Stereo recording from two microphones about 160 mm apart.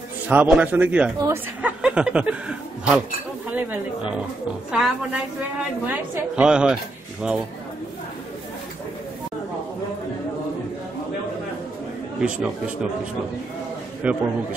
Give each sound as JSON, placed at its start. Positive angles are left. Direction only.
{"t": 0.3, "sound": "a woman's voice", "side_deg": -5}
{"t": 1.8, "sound": "a sound", "side_deg": -5}
{"t": 3.4, "sound": "a woman's voice", "side_deg": -10}
{"t": 7.2, "sound": "a sound", "side_deg": -5}
{"t": 12.2, "sound": "a woman's voice", "side_deg": -5}
{"t": 14.0, "sound": "a woman's voice", "side_deg": -10}